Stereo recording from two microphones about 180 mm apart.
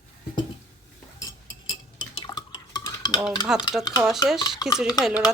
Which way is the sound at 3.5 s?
5° right (ahead or behind).